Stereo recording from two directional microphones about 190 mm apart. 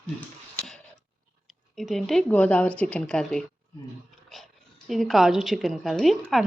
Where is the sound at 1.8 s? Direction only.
Centre (ahead or behind).